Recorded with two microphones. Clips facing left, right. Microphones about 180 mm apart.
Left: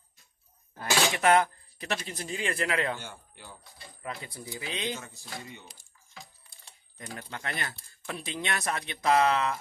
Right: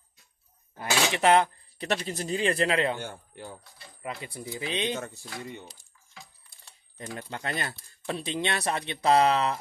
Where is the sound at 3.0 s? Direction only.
50° right (ahead or behind).